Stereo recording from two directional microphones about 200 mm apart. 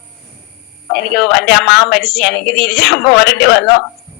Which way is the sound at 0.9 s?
55° left (ahead or behind).